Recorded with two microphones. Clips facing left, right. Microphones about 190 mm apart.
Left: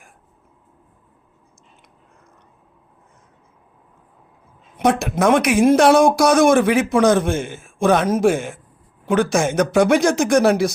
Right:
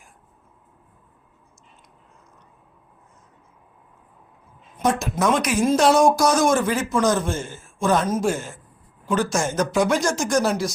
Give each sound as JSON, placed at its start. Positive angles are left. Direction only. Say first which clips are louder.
{"t": 4.8, "sound": "speech", "louder": "left 4 dB", "side_deg": 70}